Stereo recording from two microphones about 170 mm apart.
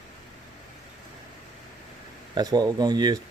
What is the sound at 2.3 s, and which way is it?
Speech, 20° right (ahead or behind).